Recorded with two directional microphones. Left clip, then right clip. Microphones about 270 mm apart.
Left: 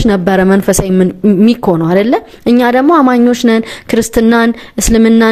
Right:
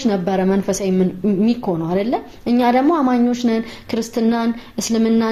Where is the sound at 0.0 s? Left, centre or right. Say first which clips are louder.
Left 8 dB; left.